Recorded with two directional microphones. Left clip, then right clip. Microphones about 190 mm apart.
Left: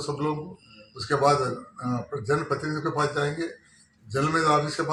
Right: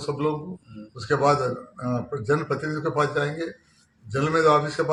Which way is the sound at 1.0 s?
45° right (ahead or behind).